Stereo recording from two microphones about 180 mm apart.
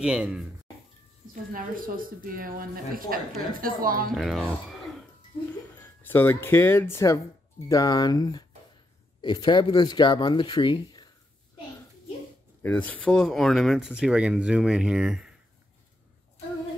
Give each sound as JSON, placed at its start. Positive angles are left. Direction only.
{"t": 0.0, "sound": "speech", "side_deg": -5}
{"t": 1.3, "sound": "speech", "side_deg": -50}
{"t": 4.1, "sound": "speech", "side_deg": 0}
{"t": 6.0, "sound": "speech", "side_deg": 10}
{"t": 12.6, "sound": "speech", "side_deg": 10}